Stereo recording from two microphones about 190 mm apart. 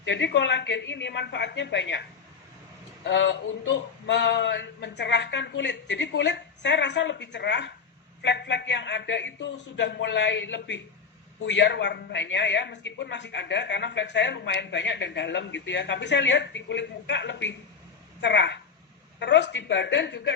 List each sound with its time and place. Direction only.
0.0 s a man's voice: 70° left (ahead or behind)